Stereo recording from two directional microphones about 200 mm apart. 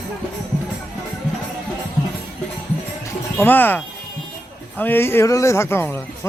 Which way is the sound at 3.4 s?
10° left (ahead or behind).